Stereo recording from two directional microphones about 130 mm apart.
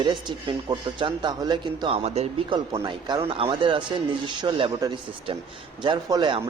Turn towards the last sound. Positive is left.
turn(degrees=-35)  # may be behind; listen again after turning